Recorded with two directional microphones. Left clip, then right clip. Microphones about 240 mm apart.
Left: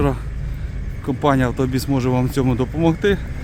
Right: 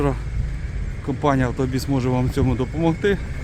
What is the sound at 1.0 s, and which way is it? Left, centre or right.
Speech, centre.